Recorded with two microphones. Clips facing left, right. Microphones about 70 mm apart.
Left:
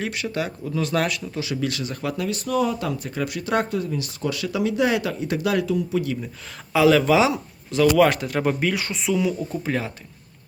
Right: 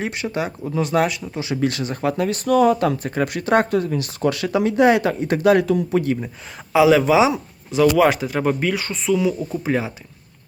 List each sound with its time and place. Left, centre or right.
0.0 s speech: right
1.6 s speech: right
6.7 s speech: centre